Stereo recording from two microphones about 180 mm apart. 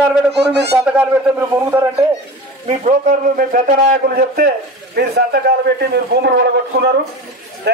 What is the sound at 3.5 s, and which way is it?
A man's voice, 50° right (ahead or behind).